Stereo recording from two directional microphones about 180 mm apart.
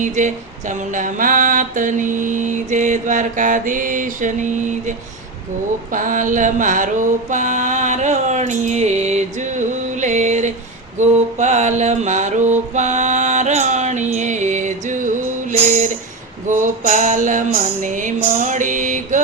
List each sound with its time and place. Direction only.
0.0 s a sound: 40° right (ahead or behind)
5.9 s mantra: 45° right (ahead or behind)
16.5 s music: 45° right (ahead or behind)